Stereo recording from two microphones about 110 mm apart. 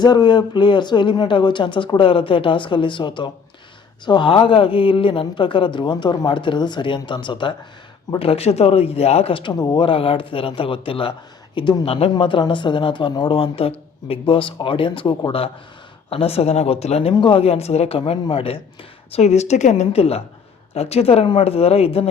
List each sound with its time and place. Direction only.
0.0 s speech: 40° left (ahead or behind)
8.2 s speech: 65° left (ahead or behind)
9.5 s speech: 40° left (ahead or behind); by 12.1 s 60° left (ahead or behind)
12.1 s speech: 45° left (ahead or behind)
16.0 s speech: 65° left (ahead or behind)
19.1 s a woman's voice: 85° left; by 22.1 s 65° left (ahead or behind)